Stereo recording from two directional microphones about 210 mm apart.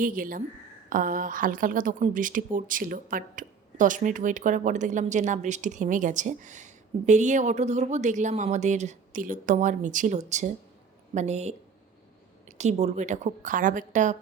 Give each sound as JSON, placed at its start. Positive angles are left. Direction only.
{"t": 0.0, "sound": "speech", "side_deg": -40}